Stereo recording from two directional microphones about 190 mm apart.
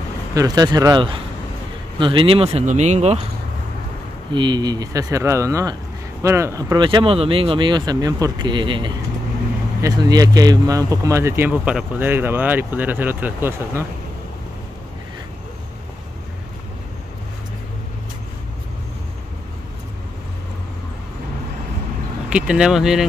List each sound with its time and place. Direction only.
0.3 s speech: 20° right (ahead or behind); by 3.3 s 35° right (ahead or behind)
4.3 s speech: 25° right (ahead or behind)
22.3 s speech: 5° right (ahead or behind)